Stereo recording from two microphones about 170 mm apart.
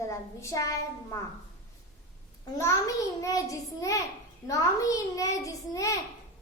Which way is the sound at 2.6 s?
20° left (ahead or behind).